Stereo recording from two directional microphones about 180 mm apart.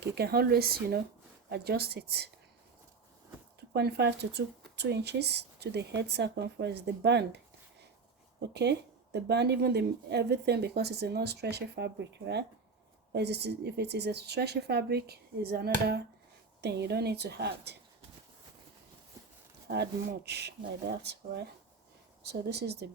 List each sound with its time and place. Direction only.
0.0 s a woman's voice: 60° right (ahead or behind)
3.7 s a woman's voice: 65° right (ahead or behind)
19.6 s speech: 65° right (ahead or behind)